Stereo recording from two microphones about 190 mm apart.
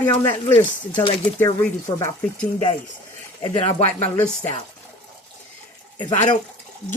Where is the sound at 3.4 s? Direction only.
30° left (ahead or behind).